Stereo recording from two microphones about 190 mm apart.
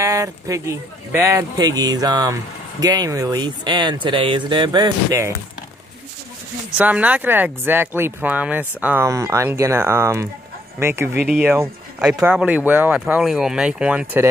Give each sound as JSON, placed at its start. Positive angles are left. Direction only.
{"t": 0.0, "sound": "speech", "side_deg": -15}
{"t": 6.8, "sound": "speech", "side_deg": -10}